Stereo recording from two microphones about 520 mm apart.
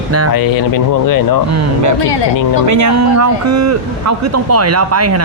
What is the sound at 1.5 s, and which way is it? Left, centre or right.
A man's voice, right.